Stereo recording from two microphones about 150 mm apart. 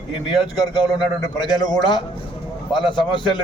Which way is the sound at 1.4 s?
30° left (ahead or behind).